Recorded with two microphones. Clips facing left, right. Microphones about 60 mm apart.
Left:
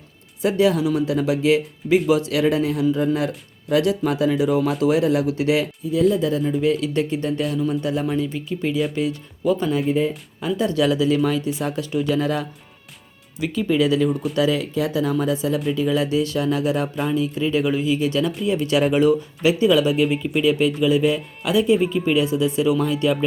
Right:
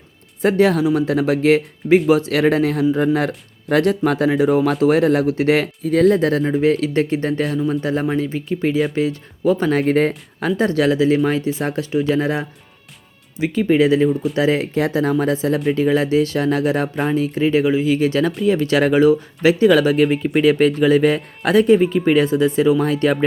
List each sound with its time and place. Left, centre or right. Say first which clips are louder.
0.4 s speech: right 3 dB; right
5.8 s speech: right 6 dB; right
6.6 s speech: right 4 dB; right
10.6 s speech: right 3 dB; right
14.1 s speech: right 4 dB; centre
14.3 s speech: right 3 dB; right